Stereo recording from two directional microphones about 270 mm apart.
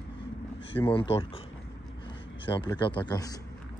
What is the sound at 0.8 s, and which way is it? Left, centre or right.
Speech, centre.